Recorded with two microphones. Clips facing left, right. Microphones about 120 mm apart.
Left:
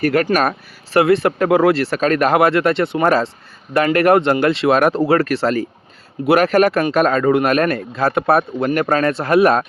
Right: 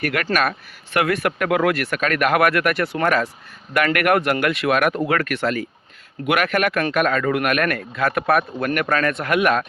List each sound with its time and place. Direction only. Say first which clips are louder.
0.0 s speech: left 6 dB; 35° left (ahead or behind)